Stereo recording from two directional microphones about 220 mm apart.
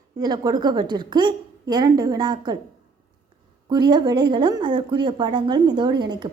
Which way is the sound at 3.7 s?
20° right (ahead or behind).